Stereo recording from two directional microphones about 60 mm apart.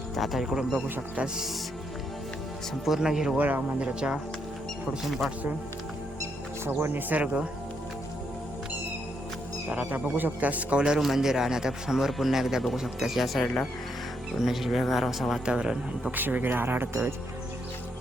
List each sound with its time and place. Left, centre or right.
0.2 s speech: centre
2.8 s a man's voice: centre
3.3 s a man's voice: right
5.0 s speech: centre
6.7 s speech: right
7.1 s a man's voice: right
9.6 s a man's voice: right; by 13.4 s centre
13.4 s speech: centre
14.3 s speech: centre
15.4 s a man's voice: centre
16.1 s speech: right